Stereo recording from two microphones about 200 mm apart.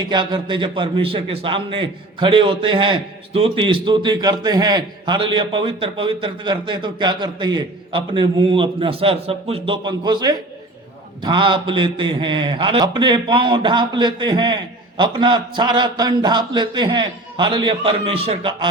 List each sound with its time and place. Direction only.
0.0 s a man's voice: 20° right (ahead or behind)